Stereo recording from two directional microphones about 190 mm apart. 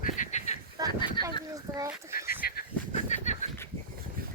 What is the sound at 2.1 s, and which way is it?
Goose, 50° left (ahead or behind).